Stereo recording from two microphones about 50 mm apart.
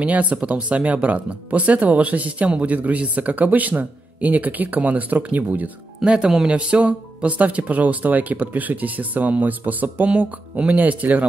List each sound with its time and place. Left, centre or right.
0.0 s speech: right
6.0 s speech: right